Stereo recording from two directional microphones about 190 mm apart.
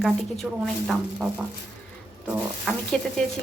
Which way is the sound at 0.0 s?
Centre (ahead or behind).